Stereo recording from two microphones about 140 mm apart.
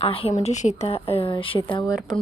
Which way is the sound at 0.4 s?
55° left (ahead or behind).